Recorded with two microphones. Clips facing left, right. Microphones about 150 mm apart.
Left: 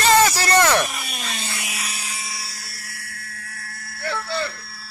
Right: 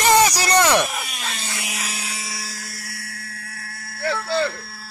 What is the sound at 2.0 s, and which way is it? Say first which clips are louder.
Helicopter: right 2 dB; 90° right.